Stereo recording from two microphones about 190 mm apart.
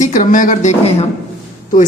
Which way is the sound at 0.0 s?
45° left (ahead or behind).